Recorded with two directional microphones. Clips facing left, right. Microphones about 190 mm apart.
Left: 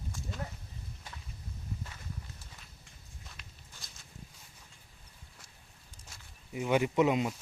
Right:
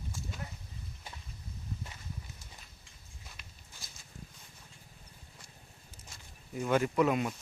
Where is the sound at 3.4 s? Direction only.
Centre (ahead or behind).